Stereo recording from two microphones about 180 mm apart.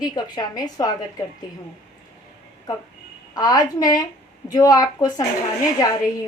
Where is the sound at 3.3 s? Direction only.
20° left (ahead or behind).